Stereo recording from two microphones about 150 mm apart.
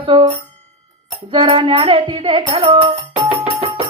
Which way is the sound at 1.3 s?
35° right (ahead or behind).